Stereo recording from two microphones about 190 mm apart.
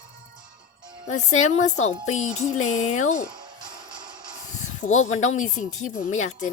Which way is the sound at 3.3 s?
25° right (ahead or behind).